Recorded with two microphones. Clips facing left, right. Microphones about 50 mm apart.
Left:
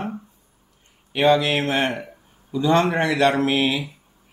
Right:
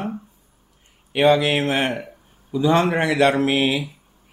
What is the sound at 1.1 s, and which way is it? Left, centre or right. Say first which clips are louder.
A man's voice: right 1 dB; centre.